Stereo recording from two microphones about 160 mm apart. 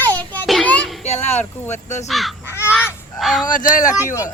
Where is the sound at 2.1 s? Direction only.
Centre (ahead or behind).